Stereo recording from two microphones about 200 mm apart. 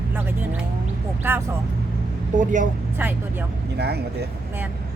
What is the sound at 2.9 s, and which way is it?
Speech, 10° right (ahead or behind).